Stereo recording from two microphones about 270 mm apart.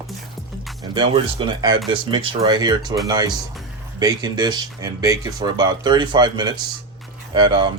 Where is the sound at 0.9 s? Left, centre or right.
Centre.